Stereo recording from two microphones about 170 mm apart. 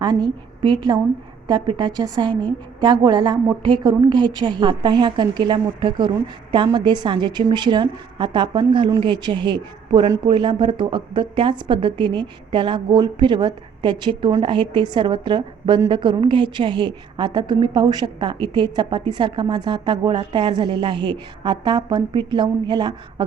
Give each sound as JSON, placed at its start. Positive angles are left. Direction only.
{"t": 0.0, "sound": "a woman's voice", "side_deg": -25}